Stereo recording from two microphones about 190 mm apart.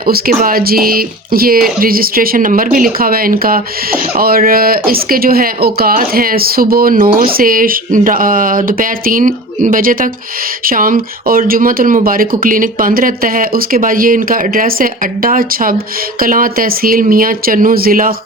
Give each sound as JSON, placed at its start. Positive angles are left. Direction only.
{"t": 0.1, "sound": "speech", "side_deg": -50}